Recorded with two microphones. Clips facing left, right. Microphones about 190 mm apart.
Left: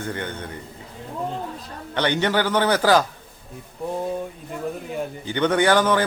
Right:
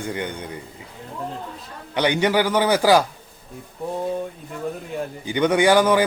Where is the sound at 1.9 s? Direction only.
10° right (ahead or behind).